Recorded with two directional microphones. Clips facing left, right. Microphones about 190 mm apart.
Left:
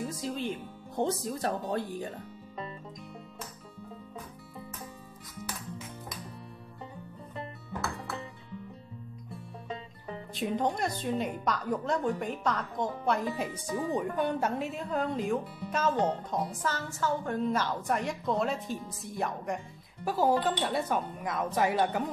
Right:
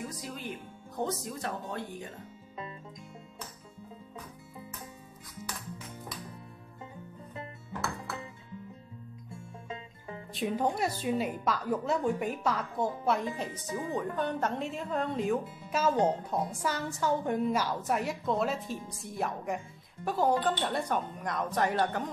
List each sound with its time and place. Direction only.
0.1 s speech: 25° left (ahead or behind)
10.3 s speech: 5° right (ahead or behind)
13.5 s speech: 30° left (ahead or behind)
13.9 s speech: 10° left (ahead or behind)